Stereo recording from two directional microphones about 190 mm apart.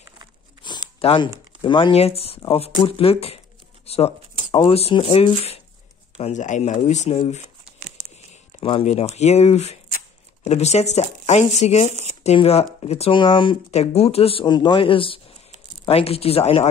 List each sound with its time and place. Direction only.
0.6 s a sound: 25° left (ahead or behind)
1.0 s speech: 25° left (ahead or behind)
3.8 s shuffling cards: 30° left (ahead or behind)
4.5 s speech: 25° left (ahead or behind)
8.5 s speech: 30° left (ahead or behind)
11.9 s shuffling cards: 35° right (ahead or behind)
12.2 s speech: 35° left (ahead or behind)